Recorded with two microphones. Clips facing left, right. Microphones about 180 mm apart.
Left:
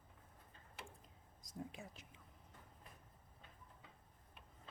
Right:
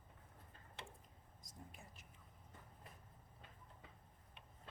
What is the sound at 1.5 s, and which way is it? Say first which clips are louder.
Speech: left 10 dB; 90° left.